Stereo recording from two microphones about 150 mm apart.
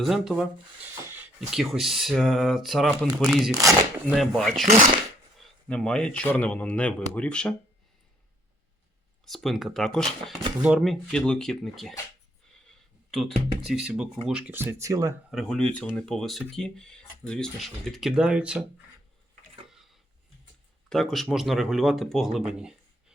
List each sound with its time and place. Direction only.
0.0 s speech: centre (ahead or behind)
3.5 s speech: 20° right (ahead or behind)
4.0 s speech: centre (ahead or behind)
9.2 s speech: centre (ahead or behind)
12.6 s a sound: centre (ahead or behind)
13.7 s speech: 5° right (ahead or behind); by 15.1 s 20° right (ahead or behind)
15.3 s speech: centre (ahead or behind)
20.9 s speech: centre (ahead or behind)